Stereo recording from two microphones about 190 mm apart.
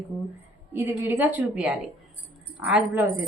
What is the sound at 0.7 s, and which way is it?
Speech, 10° right (ahead or behind).